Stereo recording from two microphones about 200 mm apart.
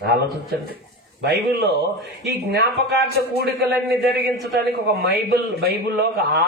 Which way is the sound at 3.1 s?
55° left (ahead or behind).